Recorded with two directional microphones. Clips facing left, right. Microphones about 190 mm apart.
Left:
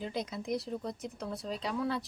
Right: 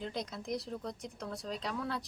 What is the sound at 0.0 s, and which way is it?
Speech, 5° left (ahead or behind).